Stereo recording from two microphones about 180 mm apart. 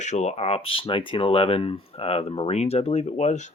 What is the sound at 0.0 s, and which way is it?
Speech, 40° left (ahead or behind).